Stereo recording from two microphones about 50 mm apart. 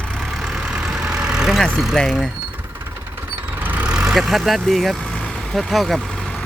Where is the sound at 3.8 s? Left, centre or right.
Centre.